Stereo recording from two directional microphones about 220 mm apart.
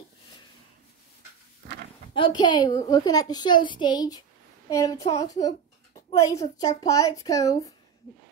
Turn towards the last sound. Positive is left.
turn(degrees=15)  # may be behind; listen again after turning